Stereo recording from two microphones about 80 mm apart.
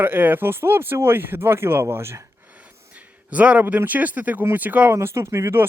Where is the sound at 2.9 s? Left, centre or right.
Centre.